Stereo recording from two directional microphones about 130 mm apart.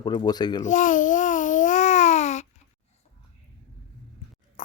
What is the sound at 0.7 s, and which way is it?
Babbling, 80° left.